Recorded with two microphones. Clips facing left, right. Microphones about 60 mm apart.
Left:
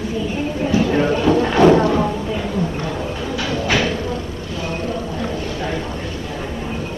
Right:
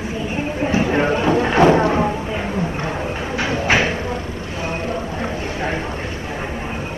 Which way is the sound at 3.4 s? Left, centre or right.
Right.